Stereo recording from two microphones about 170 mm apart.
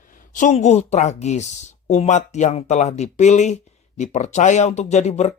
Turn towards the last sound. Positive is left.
turn(degrees=40)  # may be behind; listen again after turning